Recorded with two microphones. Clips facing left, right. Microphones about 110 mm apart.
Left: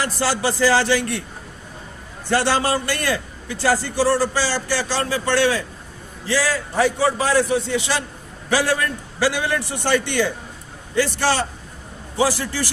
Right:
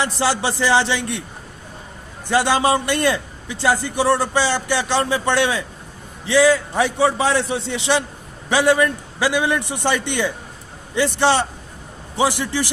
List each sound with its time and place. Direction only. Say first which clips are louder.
0.0 s a man's voice: right 1 dB; 20° right (ahead or behind)
2.2 s a man's voice: right 2 dB; 15° right (ahead or behind)